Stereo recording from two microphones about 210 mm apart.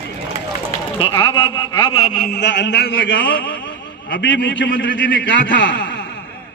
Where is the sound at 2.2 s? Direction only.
50° left (ahead or behind).